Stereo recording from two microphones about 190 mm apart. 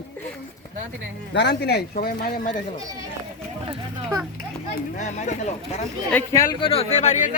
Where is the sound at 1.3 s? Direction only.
60° left (ahead or behind).